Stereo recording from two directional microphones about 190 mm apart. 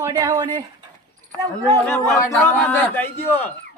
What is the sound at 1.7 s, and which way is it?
Speech, 15° left (ahead or behind).